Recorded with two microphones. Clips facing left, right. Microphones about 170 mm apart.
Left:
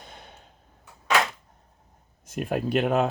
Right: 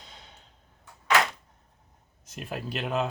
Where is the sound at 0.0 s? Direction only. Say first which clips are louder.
Left 5 dB; 55° left (ahead or behind).